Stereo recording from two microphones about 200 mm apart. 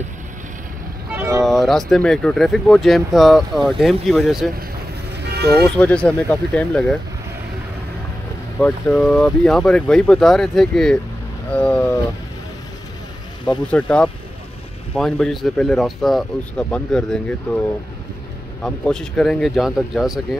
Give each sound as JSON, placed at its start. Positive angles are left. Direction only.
{"t": 1.1, "sound": "vehicle", "side_deg": -15}
{"t": 1.4, "sound": "speech", "side_deg": 0}
{"t": 5.2, "sound": "vehicle", "side_deg": -55}
{"t": 5.8, "sound": "speech", "side_deg": 5}
{"t": 8.5, "sound": "speech", "side_deg": 5}
{"t": 11.5, "sound": "whale vocalization", "side_deg": 5}
{"t": 13.7, "sound": "whale vocalization", "side_deg": 5}
{"t": 15.0, "sound": "speech", "side_deg": 0}